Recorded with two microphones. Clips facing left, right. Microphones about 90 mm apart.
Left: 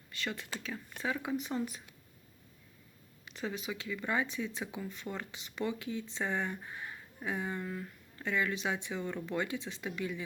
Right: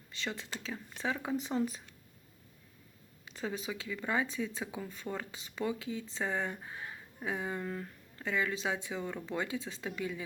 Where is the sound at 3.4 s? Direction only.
30° right (ahead or behind).